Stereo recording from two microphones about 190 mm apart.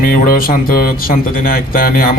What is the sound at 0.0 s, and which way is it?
Speech, 50° left (ahead or behind).